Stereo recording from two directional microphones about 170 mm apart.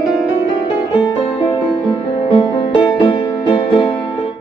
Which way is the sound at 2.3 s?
30° left (ahead or behind).